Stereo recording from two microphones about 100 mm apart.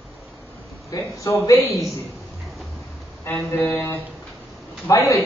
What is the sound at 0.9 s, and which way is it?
Speech, 35° left (ahead or behind).